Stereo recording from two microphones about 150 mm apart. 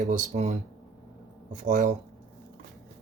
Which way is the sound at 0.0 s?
55° right (ahead or behind).